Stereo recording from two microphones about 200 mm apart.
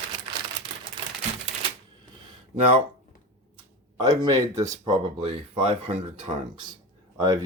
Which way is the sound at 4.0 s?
20° right (ahead or behind).